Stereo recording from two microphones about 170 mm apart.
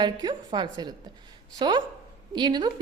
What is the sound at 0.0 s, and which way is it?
A woman's voice, 25° right (ahead or behind).